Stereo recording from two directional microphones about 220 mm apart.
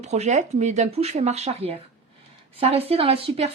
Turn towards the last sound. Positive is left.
turn(degrees=-25)  # may be behind; listen again after turning